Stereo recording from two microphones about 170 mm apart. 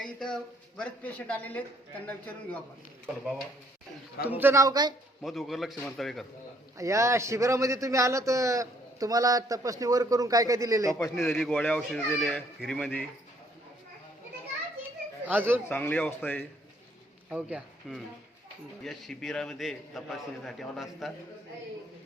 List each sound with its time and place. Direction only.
0.0 s speech: 5° left (ahead or behind)
4.4 s a man's voice: 15° right (ahead or behind)
5.2 s a man's voice: centre (ahead or behind)
6.7 s a man's voice: 15° right (ahead or behind)
11.2 s a man's voice: 5° left (ahead or behind)
15.2 s speech: 10° right (ahead or behind)
15.7 s speech: 10° left (ahead or behind)
17.2 s a man's voice: 5° right (ahead or behind)